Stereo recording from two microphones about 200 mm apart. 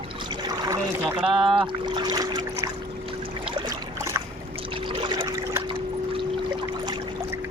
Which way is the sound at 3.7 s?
15° right (ahead or behind).